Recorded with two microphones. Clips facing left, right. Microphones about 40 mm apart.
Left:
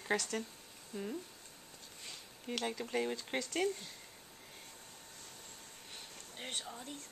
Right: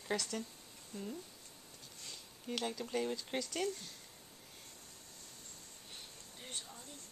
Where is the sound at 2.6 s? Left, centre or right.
Centre.